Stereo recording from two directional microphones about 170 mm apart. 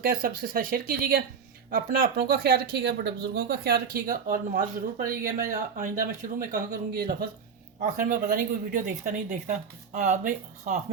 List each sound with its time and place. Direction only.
0.0 s speech: 55° right (ahead or behind)
4.1 s speech: 55° right (ahead or behind)